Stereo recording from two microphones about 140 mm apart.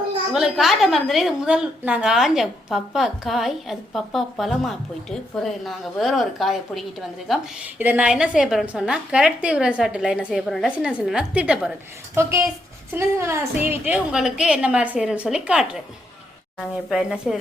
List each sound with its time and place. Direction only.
0.3 s a woman's voice: 5° right (ahead or behind)
7.3 s a woman's voice: 10° right (ahead or behind)
12.1 s a woman's voice: 20° right (ahead or behind); by 17.3 s 5° right (ahead or behind)